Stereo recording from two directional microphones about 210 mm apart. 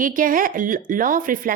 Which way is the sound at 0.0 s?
40° right (ahead or behind).